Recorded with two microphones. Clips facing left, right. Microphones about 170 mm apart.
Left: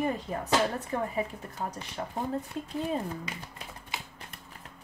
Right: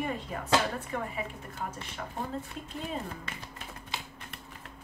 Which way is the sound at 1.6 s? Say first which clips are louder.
Left 2 dB; 30° left (ahead or behind).